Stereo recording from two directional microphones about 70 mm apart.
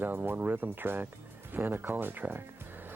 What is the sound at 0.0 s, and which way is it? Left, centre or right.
Speech, right.